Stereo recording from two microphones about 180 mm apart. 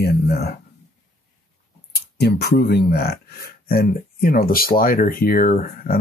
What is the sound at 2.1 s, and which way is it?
Speech, 65° left (ahead or behind).